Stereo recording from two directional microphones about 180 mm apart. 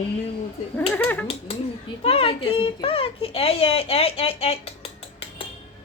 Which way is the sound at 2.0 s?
30° left (ahead or behind).